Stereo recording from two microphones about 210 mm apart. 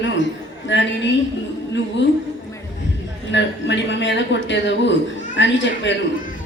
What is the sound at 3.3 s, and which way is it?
Speech, 60° left (ahead or behind).